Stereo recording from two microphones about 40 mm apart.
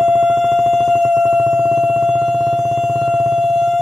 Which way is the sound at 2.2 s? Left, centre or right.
Centre.